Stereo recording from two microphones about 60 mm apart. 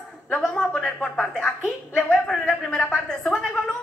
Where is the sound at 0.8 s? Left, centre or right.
Centre.